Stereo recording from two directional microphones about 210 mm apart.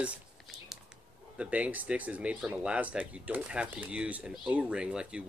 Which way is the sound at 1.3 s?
5° right (ahead or behind).